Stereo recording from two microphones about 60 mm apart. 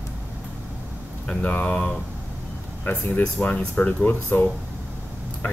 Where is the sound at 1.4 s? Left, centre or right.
Left.